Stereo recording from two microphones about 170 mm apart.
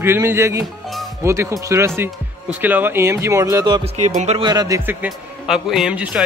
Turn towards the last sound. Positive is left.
turn(degrees=-5)  # may be behind; listen again after turning